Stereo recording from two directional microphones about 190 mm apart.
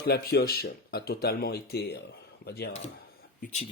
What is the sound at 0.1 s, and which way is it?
Speech, 55° left (ahead or behind).